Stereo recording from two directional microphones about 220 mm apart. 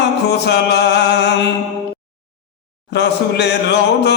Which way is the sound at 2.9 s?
50° left (ahead or behind).